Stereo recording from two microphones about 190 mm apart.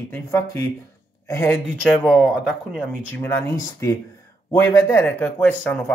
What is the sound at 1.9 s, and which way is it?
Speech, 5° right (ahead or behind).